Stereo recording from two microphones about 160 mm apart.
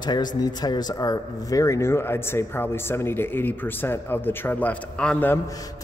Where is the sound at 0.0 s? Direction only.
25° left (ahead or behind).